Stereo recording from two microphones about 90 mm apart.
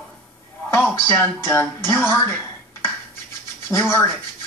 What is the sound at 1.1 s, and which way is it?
Speech, 20° left (ahead or behind).